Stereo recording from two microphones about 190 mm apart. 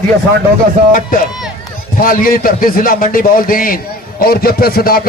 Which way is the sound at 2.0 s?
45° left (ahead or behind).